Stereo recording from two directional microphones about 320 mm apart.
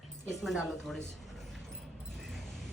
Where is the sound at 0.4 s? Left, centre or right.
Centre.